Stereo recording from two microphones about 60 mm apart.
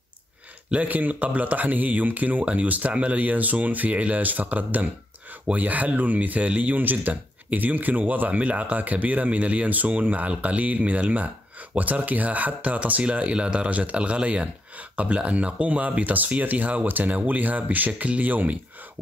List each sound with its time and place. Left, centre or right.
0.7 s speech: right